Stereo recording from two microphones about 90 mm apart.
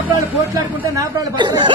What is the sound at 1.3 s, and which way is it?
Speech, 55° right (ahead or behind).